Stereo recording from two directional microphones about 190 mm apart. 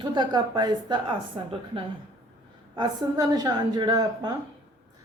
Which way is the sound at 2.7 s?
20° right (ahead or behind).